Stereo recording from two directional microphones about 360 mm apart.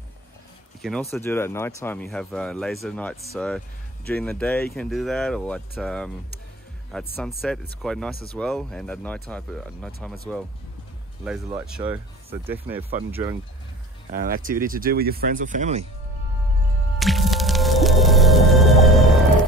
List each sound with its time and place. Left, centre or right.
1.1 s speech: centre
11.2 s speech: centre
14.1 s speech: right
17.0 s music: centre